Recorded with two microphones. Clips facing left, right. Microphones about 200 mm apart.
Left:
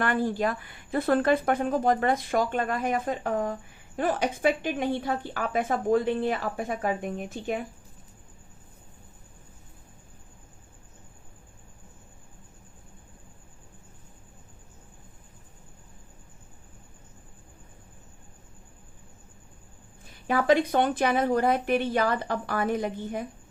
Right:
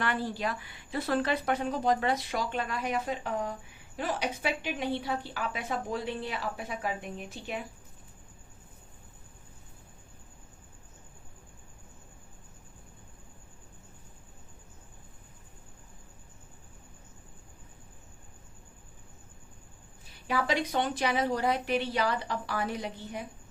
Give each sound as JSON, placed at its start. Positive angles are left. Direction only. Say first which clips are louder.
{"t": 0.0, "sound": "speech", "louder": "left 6 dB", "side_deg": 50}
{"t": 20.2, "sound": "speech", "louder": "left 7 dB", "side_deg": 50}